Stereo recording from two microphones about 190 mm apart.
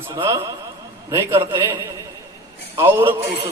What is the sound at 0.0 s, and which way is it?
A man's voice, 15° right (ahead or behind).